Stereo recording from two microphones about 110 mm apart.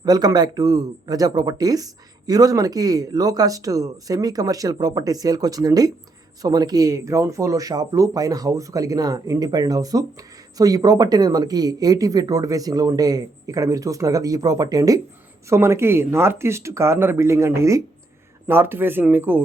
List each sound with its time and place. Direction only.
0.0 s a man's voice: 35° right (ahead or behind); by 19.4 s 15° right (ahead or behind)